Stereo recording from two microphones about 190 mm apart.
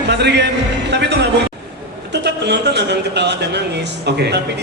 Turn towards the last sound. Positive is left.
turn(degrees=-65)  # may be behind; listen again after turning